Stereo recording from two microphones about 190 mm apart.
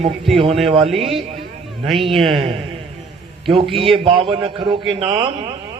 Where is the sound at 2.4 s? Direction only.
30° right (ahead or behind).